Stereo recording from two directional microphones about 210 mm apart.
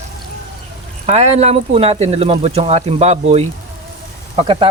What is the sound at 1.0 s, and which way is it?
Speech, 30° right (ahead or behind).